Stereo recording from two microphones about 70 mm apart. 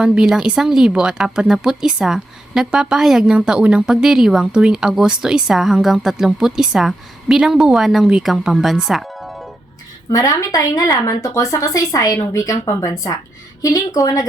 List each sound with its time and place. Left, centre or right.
0.0 s speech: centre
10.1 s a woman's voice: left